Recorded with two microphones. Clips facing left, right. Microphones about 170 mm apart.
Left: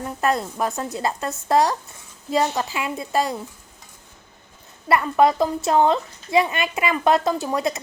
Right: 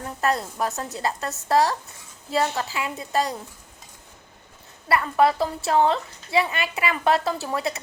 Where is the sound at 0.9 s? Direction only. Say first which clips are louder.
Left 3 dB; 15° left (ahead or behind).